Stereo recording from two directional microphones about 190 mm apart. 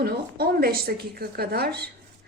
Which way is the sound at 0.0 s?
55° right (ahead or behind).